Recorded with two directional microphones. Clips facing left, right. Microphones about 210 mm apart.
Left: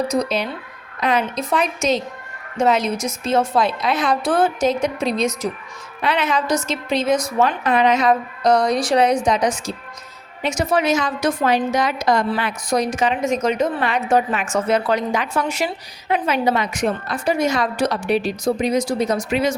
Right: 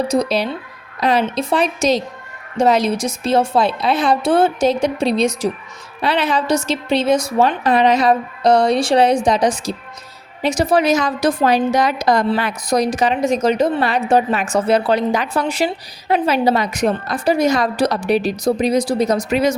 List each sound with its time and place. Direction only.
0.1 s a woman's voice: 35° right (ahead or behind)